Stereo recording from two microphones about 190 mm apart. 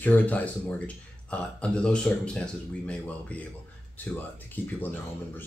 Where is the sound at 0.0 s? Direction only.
10° left (ahead or behind).